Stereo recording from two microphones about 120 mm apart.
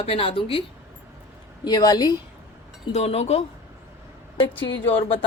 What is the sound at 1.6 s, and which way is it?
Speech, 35° left (ahead or behind).